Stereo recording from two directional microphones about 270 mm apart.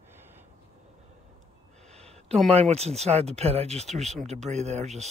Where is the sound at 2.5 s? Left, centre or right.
Right.